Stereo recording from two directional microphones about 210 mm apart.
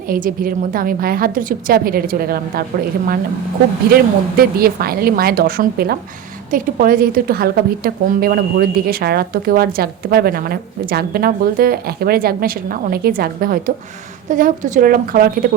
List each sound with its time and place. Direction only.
0.1 s a woman's voice: 45° right (ahead or behind)
3.8 s a woman's voice: 45° right (ahead or behind)